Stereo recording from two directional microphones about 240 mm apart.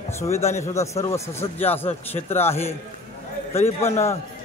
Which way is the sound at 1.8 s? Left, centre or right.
Left.